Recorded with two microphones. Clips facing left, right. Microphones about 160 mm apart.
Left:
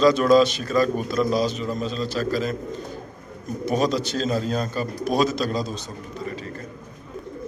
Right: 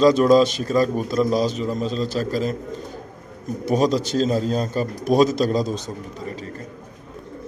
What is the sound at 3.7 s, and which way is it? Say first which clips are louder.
A man's voice: right 3 dB; 40° right (ahead or behind).